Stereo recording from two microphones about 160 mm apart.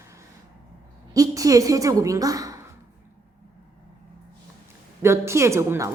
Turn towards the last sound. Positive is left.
turn(degrees=-15)  # may be behind; listen again after turning